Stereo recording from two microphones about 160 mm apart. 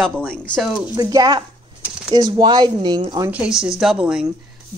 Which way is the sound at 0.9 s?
25° right (ahead or behind).